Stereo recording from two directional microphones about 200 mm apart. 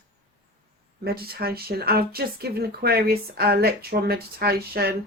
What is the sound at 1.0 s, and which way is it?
Speech, 50° right (ahead or behind).